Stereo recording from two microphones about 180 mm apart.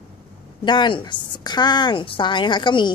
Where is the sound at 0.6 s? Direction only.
25° left (ahead or behind).